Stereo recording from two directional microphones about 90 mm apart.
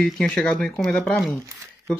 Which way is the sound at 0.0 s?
5° left (ahead or behind).